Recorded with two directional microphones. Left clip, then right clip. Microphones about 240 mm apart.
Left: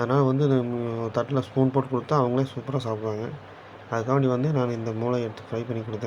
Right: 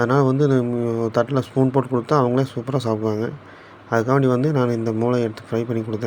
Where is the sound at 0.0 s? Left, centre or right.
Centre.